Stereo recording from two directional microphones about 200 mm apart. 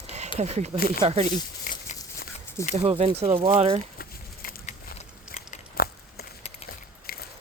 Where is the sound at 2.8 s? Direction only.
25° right (ahead or behind).